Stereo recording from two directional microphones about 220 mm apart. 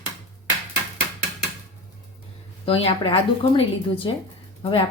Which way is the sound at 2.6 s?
25° left (ahead or behind).